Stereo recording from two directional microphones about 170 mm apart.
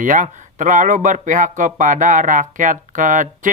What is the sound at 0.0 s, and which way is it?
Speech, 50° right (ahead or behind).